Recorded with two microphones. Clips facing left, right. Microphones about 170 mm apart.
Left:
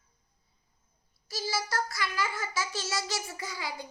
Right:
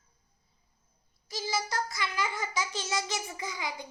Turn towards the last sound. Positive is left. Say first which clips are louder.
# right 1 dB
turn(degrees=-20)  # may be behind; listen again after turning